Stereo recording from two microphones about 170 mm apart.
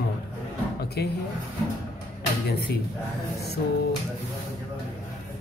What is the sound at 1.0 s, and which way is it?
Speech, 70° left (ahead or behind).